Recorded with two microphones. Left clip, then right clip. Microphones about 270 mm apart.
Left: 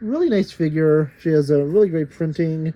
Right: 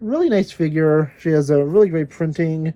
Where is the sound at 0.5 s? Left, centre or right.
Right.